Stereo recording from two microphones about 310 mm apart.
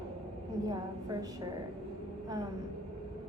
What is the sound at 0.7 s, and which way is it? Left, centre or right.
Speech, centre.